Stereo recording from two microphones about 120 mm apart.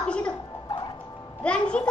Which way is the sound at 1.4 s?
10° left (ahead or behind).